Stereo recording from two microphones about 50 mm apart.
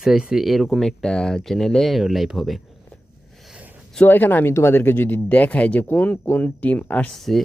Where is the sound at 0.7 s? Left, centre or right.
Centre.